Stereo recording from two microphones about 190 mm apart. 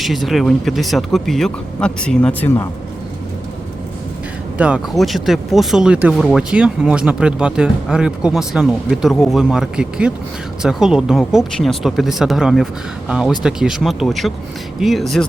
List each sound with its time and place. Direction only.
0.0 s speech: centre (ahead or behind)
4.5 s speech: 5° right (ahead or behind)